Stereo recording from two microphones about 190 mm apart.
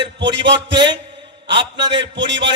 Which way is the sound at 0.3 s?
70° right (ahead or behind).